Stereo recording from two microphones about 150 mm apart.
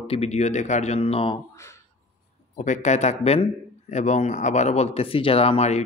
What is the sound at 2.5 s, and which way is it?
Speech, 55° left (ahead or behind).